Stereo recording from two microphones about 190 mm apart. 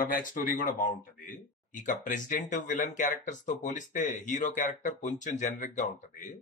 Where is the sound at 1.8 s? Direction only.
45° left (ahead or behind).